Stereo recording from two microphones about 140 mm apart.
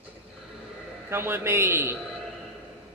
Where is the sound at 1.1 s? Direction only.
15° right (ahead or behind).